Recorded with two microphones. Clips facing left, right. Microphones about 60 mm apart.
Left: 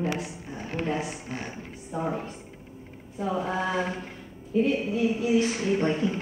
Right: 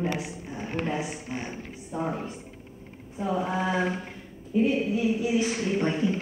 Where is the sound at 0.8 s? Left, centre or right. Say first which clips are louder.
Left 1 dB; centre.